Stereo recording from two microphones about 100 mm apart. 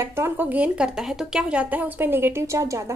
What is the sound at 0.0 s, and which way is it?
Speech, 25° right (ahead or behind).